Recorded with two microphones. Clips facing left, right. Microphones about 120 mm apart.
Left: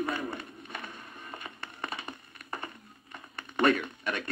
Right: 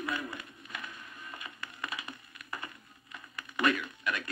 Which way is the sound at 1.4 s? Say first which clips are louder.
Left 2 dB; 35° left (ahead or behind).